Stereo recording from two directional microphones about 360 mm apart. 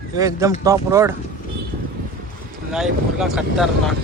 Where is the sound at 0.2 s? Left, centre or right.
Centre.